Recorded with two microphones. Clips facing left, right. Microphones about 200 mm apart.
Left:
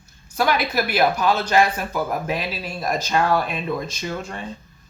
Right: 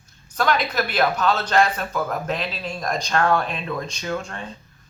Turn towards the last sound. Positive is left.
turn(degrees=5)  # may be behind; listen again after turning